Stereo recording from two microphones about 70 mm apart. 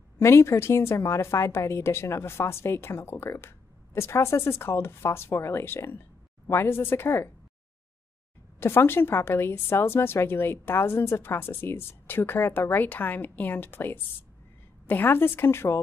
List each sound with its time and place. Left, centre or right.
0.2 s a woman's voice: left
8.5 s a woman's voice: left